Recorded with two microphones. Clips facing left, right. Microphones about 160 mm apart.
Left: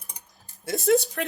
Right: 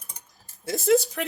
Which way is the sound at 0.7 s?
Centre (ahead or behind).